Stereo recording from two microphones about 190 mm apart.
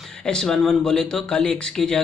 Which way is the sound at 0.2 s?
5° left (ahead or behind).